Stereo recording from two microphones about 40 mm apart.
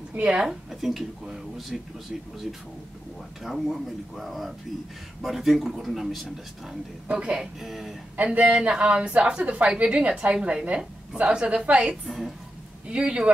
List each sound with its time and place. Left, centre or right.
0.5 s speech: centre
3.4 s speech: centre
7.1 s a woman's voice: right
7.6 s speech: centre
8.2 s a woman's voice: right
11.9 s speech: centre
12.8 s a woman's voice: right